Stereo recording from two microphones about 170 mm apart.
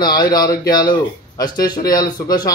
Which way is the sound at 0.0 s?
25° left (ahead or behind).